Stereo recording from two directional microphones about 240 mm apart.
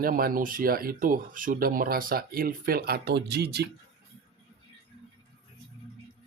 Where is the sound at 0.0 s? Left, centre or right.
Right.